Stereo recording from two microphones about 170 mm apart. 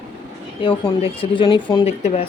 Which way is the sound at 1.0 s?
30° left (ahead or behind).